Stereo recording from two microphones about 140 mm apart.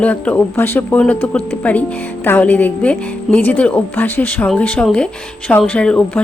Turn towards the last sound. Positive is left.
turn(degrees=10)  # may be behind; listen again after turning